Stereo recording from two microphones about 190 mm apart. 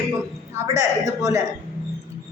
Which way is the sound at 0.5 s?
15° right (ahead or behind).